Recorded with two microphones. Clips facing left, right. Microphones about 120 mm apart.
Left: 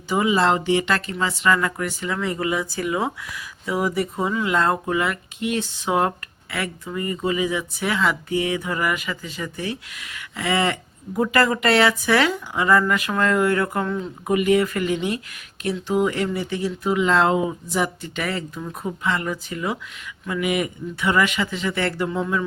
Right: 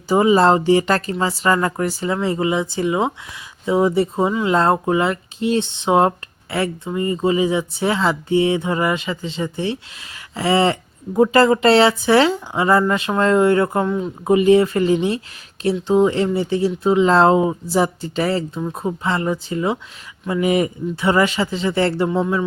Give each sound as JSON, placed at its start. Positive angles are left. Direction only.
{"t": 0.1, "sound": "speech", "side_deg": -35}